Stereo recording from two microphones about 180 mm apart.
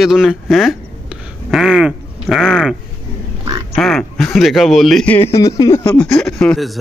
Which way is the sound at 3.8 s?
Centre (ahead or behind).